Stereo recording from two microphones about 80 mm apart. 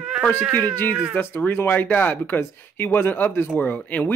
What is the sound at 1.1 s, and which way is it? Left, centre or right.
Speech, left.